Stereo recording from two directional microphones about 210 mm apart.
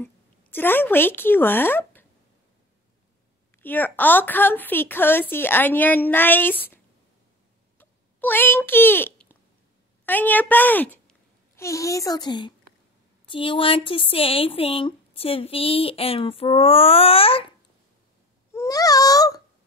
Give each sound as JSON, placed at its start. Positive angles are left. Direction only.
{"t": 0.0, "sound": "a woman's voice", "side_deg": 10}
{"t": 3.5, "sound": "a woman's voice", "side_deg": 10}
{"t": 7.8, "sound": "a sound", "side_deg": 10}
{"t": 10.0, "sound": "speech", "side_deg": 10}
{"t": 18.5, "sound": "baby cry", "side_deg": 15}